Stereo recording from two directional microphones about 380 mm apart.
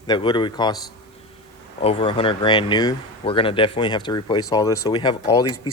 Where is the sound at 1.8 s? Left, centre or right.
Centre.